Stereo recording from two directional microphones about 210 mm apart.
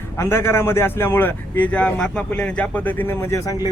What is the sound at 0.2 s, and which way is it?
Speech, 10° left (ahead or behind).